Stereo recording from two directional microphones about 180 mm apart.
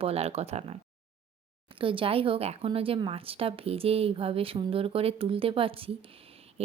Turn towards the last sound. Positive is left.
turn(degrees=-35)  # may be behind; listen again after turning